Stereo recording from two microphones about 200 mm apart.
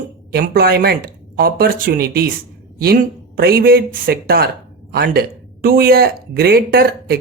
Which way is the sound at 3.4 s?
50° right (ahead or behind).